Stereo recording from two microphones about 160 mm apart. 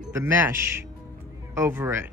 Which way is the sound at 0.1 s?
15° right (ahead or behind).